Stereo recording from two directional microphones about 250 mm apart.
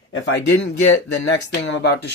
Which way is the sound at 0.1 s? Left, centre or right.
Left.